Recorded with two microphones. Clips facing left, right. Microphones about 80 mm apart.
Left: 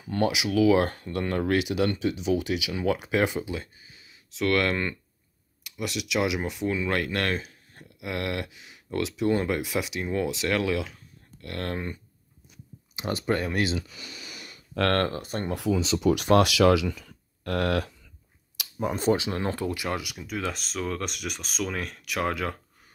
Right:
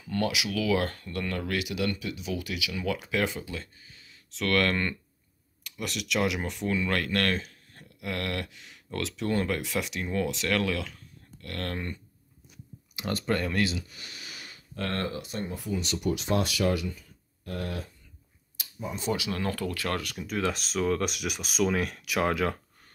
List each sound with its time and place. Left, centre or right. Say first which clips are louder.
0.0 s speech: left 3 dB; left
14.8 s speech: left 8 dB; left
15.0 s speech: left 3 dB; left
15.5 s speech: left 10 dB; left
18.6 s a sound: left 7 dB; left
19.1 s speech: left 3 dB; left; by 22.6 s centre